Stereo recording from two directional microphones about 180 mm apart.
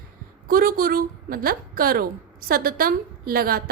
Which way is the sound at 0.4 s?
50° right (ahead or behind).